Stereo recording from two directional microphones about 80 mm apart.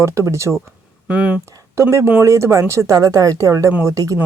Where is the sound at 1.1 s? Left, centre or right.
Centre.